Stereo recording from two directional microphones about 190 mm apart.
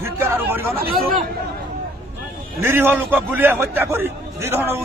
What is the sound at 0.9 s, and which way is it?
Speech, 50° right (ahead or behind).